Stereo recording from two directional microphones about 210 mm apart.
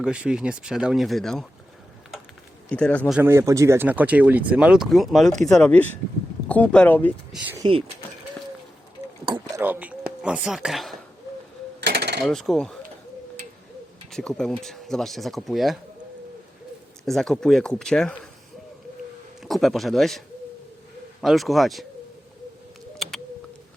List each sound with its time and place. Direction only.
0.0 s speech: 5° right (ahead or behind)
2.6 s speech: 5° left (ahead or behind)
3.2 s speech: 10° right (ahead or behind); by 7.1 s 10° left (ahead or behind)
7.6 s speech: 25° right (ahead or behind)
9.2 s a sound: 20° right (ahead or behind)
10.2 s speech: 5° right (ahead or behind)
11.9 s a sound: 55° right (ahead or behind)
12.2 s speech: centre (ahead or behind)
14.1 s speech: 5° left (ahead or behind)
17.1 s speech: centre (ahead or behind)
19.4 s speech: centre (ahead or behind)